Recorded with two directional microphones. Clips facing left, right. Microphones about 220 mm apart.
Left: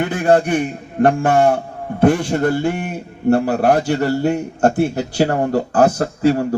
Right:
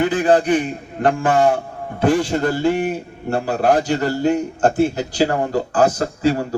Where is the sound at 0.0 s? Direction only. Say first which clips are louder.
Even; 60° left (ahead or behind).